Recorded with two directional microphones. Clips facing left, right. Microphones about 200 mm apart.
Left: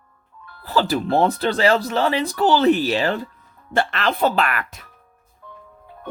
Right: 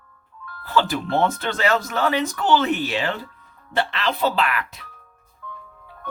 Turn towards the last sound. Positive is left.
turn(degrees=50)  # may be behind; listen again after turning